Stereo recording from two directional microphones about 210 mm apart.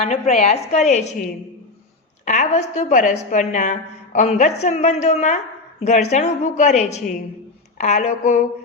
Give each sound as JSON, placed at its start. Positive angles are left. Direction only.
{"t": 0.0, "sound": "a woman's voice", "side_deg": 35}